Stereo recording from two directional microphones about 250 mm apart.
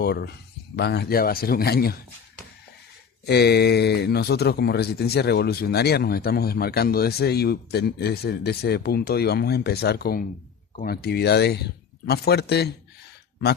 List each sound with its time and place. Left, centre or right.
0.0 s speech: left
3.2 s speech: left